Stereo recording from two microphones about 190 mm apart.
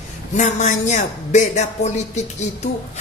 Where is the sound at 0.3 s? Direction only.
40° left (ahead or behind).